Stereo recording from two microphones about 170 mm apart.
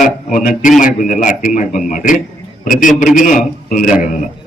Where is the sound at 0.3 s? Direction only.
50° left (ahead or behind).